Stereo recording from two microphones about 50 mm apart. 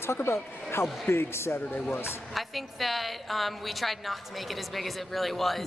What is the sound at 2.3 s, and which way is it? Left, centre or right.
A woman's voice, centre.